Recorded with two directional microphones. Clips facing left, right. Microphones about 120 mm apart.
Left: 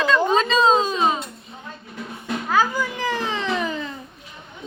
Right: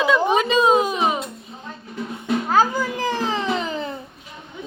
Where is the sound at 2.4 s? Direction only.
40° right (ahead or behind).